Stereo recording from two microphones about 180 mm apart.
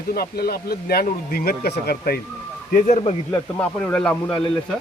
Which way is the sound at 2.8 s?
45° left (ahead or behind).